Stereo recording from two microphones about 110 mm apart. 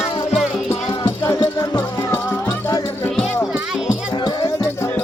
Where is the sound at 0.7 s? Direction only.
25° left (ahead or behind).